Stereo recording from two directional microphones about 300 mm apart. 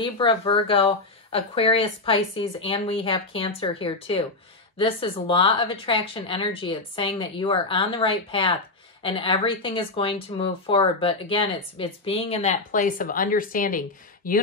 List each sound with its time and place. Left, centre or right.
0.0 s speech: centre